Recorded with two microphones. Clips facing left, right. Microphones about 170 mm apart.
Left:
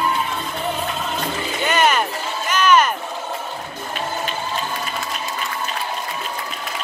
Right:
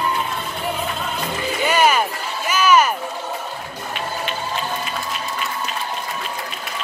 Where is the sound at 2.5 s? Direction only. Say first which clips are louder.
Even; 5° right (ahead or behind).